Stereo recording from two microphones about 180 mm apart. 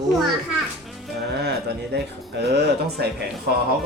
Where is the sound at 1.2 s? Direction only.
65° right (ahead or behind).